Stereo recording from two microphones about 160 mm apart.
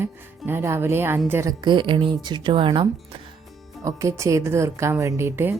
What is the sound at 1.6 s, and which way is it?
A woman's voice, 30° right (ahead or behind).